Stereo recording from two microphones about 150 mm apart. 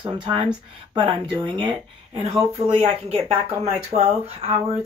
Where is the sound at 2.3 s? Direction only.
20° right (ahead or behind).